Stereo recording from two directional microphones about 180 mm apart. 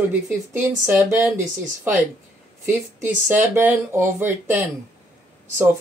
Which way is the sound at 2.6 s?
10° right (ahead or behind).